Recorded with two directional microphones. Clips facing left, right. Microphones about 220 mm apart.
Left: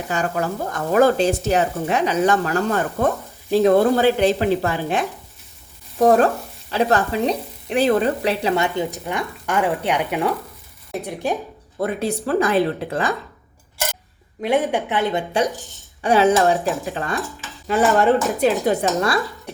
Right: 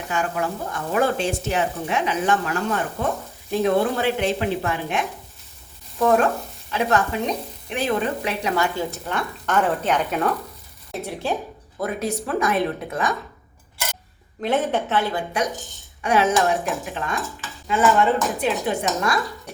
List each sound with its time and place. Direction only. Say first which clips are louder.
0.1 s a woman's voice: left 2 dB; 40° left (ahead or behind); by 11.3 s 15° left (ahead or behind)
11.8 s speech: left 3 dB; 30° left (ahead or behind)
14.4 s a woman's voice: left 2 dB; 15° left (ahead or behind)
16.0 s speech: left 4 dB; 30° left (ahead or behind)